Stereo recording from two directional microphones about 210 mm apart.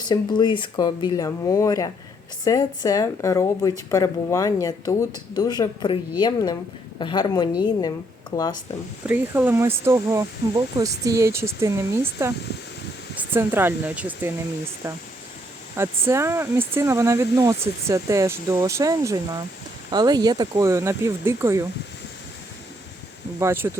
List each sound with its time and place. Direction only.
0.0 s a woman's voice: 20° left (ahead or behind)
9.0 s speech: 10° right (ahead or behind)
13.1 s speech: 10° right (ahead or behind)
23.4 s speech: 10° right (ahead or behind)